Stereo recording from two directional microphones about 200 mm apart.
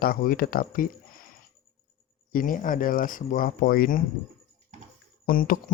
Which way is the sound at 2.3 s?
40° left (ahead or behind).